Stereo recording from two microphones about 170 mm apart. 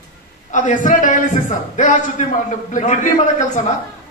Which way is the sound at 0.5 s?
45° left (ahead or behind).